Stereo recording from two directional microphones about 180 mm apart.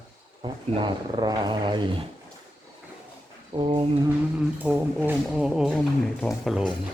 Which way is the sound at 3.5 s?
30° right (ahead or behind).